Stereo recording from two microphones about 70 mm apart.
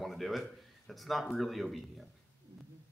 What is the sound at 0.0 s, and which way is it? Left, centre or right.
Speech, centre.